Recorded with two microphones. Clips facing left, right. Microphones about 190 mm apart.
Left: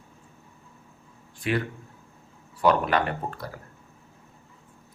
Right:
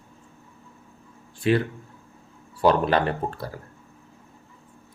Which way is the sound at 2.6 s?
30° right (ahead or behind).